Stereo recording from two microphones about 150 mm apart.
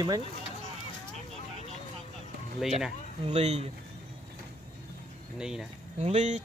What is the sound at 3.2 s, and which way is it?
Speech, 45° right (ahead or behind).